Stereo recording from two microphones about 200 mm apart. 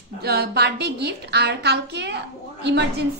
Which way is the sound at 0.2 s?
50° right (ahead or behind).